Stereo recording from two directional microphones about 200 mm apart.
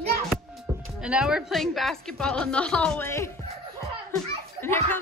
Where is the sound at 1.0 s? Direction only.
5° right (ahead or behind); by 3.3 s 15° left (ahead or behind).